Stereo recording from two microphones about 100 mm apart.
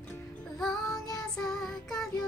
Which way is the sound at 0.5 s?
5° left (ahead or behind).